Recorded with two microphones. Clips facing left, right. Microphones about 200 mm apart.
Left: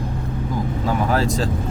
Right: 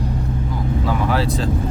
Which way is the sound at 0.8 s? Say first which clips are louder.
Left 1 dB; 45° left (ahead or behind).